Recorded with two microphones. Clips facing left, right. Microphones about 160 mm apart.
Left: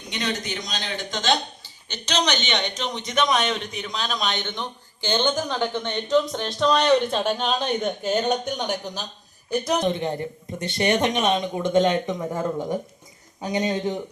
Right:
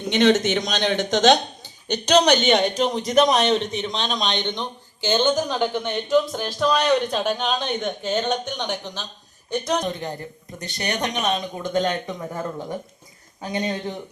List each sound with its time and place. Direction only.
0.1 s a man's voice: 80° right
2.0 s a man's voice: 50° right (ahead or behind); by 9.8 s 5° left (ahead or behind)
9.8 s speech: 25° left (ahead or behind)